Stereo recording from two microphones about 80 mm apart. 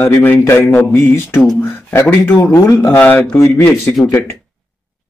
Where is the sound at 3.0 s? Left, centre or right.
Centre.